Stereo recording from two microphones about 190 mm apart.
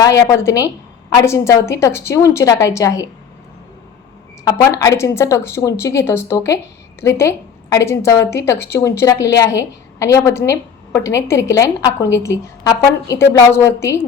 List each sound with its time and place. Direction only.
0.0 s a woman's voice: 15° left (ahead or behind)
4.4 s a woman's voice: 20° left (ahead or behind)